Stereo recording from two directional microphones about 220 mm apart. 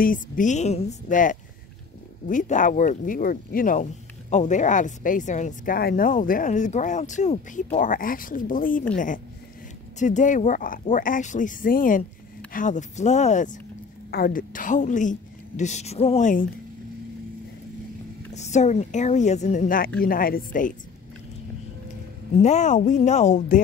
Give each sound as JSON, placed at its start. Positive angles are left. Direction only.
{"t": 0.0, "sound": "speech", "side_deg": 35}
{"t": 18.3, "sound": "speech", "side_deg": 30}
{"t": 22.4, "sound": "speech", "side_deg": 30}